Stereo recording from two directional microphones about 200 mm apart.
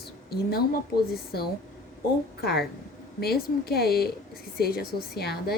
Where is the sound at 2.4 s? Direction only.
55° left (ahead or behind).